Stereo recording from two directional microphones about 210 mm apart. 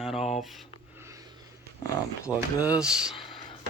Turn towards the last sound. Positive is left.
turn(degrees=0)  # may be behind; listen again after turning